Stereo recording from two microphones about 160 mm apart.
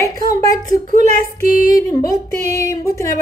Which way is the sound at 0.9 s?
55° right (ahead or behind).